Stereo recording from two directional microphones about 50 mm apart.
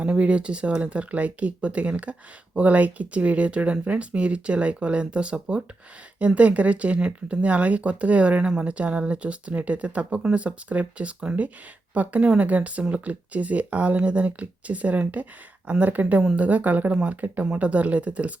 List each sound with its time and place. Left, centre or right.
0.0 s a woman's voice: right
16.9 s speech: right
17.2 s a woman's voice: right